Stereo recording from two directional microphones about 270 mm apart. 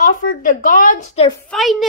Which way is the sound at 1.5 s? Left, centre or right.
Centre.